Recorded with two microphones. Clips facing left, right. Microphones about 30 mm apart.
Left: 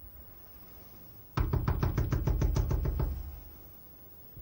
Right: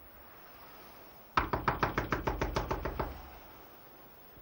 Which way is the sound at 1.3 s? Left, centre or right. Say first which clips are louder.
Right 5 dB; right.